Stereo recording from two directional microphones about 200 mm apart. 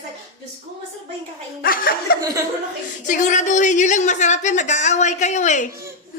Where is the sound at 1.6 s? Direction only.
45° left (ahead or behind).